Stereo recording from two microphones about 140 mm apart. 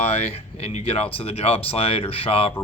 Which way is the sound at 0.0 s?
45° left (ahead or behind).